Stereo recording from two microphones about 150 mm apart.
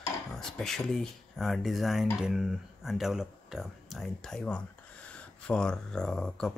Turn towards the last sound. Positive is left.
turn(degrees=5)  # may be behind; listen again after turning